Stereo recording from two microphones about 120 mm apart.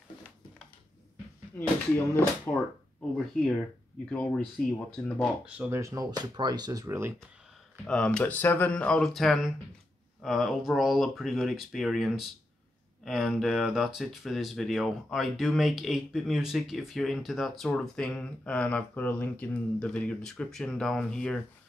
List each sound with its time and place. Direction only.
2.5 s speech: 20° left (ahead or behind)
4.1 s speech: 10° left (ahead or behind)
5.7 s speech: 25° right (ahead or behind)
7.8 s speech: 5° left (ahead or behind)